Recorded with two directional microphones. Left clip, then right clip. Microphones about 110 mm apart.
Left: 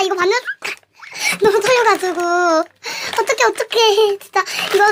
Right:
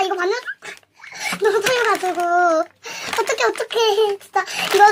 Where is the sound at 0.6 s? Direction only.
55° left (ahead or behind).